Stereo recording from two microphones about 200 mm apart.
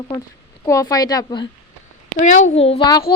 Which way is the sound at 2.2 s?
40° left (ahead or behind).